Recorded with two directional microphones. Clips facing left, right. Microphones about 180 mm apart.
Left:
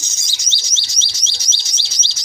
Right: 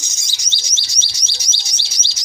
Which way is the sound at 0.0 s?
15° right (ahead or behind).